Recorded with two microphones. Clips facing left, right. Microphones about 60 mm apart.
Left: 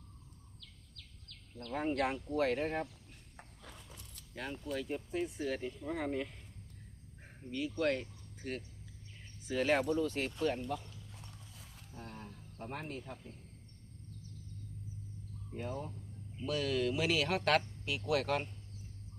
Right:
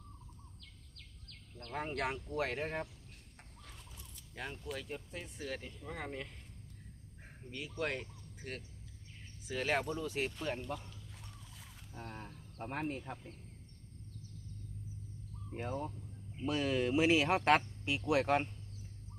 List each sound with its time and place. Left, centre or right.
0.9 s a sound: right
1.7 s speech: centre
4.4 s speech: centre
7.5 s speech: centre
11.9 s speech: right
15.5 s speech: right